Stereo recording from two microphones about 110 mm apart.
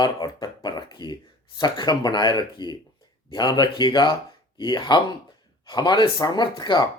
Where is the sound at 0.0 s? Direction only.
40° left (ahead or behind).